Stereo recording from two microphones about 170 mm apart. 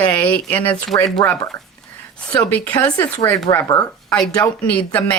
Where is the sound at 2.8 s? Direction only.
20° left (ahead or behind).